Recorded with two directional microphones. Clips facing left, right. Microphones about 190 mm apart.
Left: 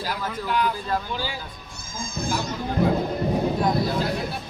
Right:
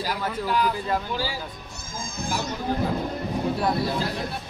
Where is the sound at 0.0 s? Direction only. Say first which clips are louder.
Right 1 dB; 5° right (ahead or behind).